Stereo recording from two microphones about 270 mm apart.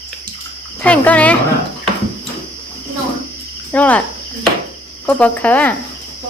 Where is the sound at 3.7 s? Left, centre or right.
Centre.